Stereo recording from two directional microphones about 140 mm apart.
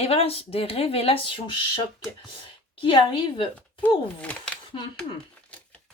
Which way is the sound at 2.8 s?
40° left (ahead or behind).